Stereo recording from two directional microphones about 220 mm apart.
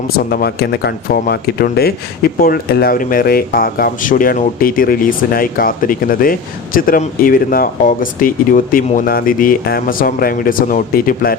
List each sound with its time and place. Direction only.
0.3 s speech: 45° left (ahead or behind)